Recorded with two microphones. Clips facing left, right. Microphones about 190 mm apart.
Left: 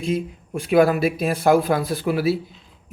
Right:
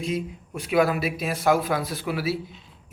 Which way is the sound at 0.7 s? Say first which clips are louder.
Left 5 dB; 50° left (ahead or behind).